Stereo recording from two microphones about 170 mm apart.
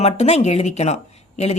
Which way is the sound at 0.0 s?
40° left (ahead or behind).